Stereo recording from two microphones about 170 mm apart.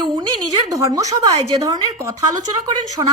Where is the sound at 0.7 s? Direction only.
20° right (ahead or behind).